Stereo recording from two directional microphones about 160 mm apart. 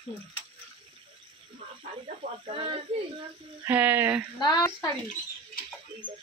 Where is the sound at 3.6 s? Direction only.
10° right (ahead or behind).